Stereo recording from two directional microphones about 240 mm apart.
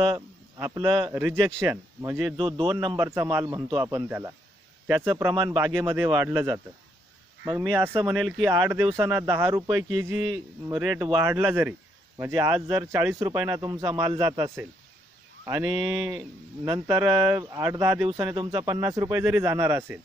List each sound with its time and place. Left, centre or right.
0.6 s speech: centre
2.3 s a man's voice: right
3.1 s speech: centre
5.7 s speech: centre